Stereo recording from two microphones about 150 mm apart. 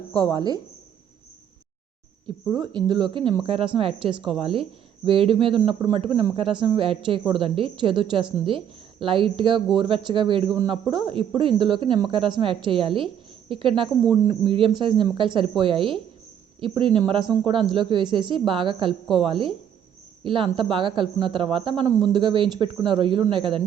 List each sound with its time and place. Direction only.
0.2 s speech: 25° right (ahead or behind)
2.2 s speech: 30° right (ahead or behind)